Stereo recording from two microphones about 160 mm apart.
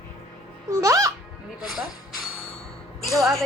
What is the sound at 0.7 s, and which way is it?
Speech, 20° right (ahead or behind).